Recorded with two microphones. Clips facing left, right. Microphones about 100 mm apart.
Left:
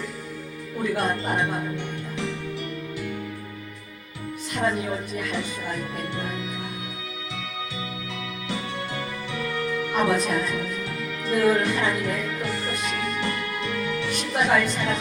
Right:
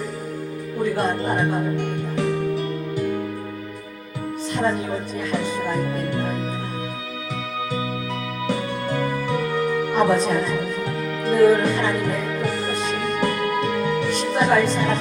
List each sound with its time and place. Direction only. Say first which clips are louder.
1.7 s speech: right 7 dB; 50° right (ahead or behind)
4.5 s speech: right 3 dB; 35° right (ahead or behind)
8.4 s music: right 7 dB; 50° right (ahead or behind)
10.0 s speech: right 4 dB; 30° right (ahead or behind)
12.6 s music: right 5 dB; 35° right (ahead or behind)
13.2 s music: right 7 dB; 50° right (ahead or behind)
14.1 s speech: right 2 dB; 35° right (ahead or behind)